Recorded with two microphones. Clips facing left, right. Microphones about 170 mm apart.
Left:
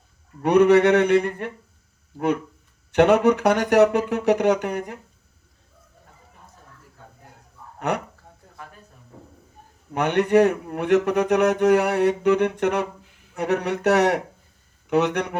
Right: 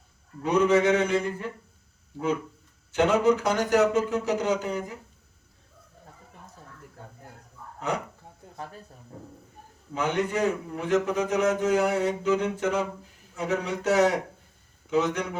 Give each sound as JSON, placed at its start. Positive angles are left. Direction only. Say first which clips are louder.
{"t": 0.4, "sound": "a man's voice", "louder": "left 6 dB", "side_deg": 65}
{"t": 7.8, "sound": "speech", "louder": "left 4 dB", "side_deg": 65}
{"t": 9.9, "sound": "a man's voice", "louder": "left 8 dB", "side_deg": 65}